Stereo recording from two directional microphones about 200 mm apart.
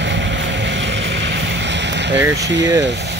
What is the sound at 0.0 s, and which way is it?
Vehicle, 60° right (ahead or behind).